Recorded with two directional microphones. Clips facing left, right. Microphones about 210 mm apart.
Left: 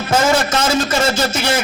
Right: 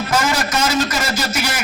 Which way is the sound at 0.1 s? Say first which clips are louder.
Left 6 dB; 25° left (ahead or behind).